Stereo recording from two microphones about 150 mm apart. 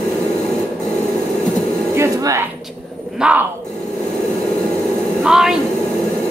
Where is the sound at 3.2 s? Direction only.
5° right (ahead or behind).